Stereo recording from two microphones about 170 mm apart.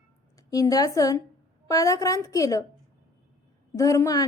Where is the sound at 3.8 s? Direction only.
20° left (ahead or behind).